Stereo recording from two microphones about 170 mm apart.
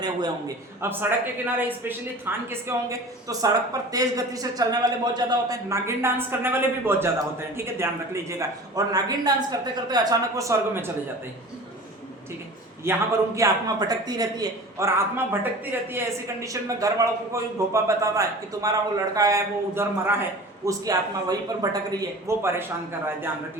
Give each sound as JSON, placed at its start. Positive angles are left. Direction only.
{"t": 0.0, "sound": "a man's voice", "side_deg": -25}
{"t": 1.5, "sound": "a man's voice", "side_deg": -10}
{"t": 12.8, "sound": "a man's voice", "side_deg": -15}